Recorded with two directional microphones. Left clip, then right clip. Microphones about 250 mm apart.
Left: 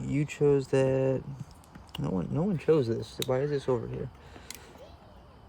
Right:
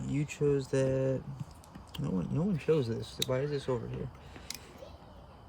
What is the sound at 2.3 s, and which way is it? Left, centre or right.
Speech, left.